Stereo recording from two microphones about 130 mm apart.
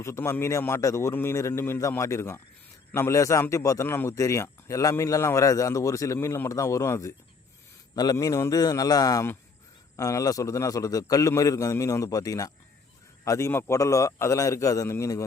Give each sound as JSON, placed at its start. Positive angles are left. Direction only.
{"t": 0.0, "sound": "speech", "side_deg": 20}